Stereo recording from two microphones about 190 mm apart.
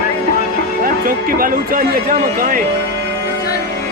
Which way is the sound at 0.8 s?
50° right (ahead or behind).